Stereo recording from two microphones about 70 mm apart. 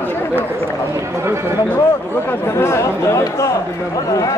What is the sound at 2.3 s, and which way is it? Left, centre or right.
Speech, left.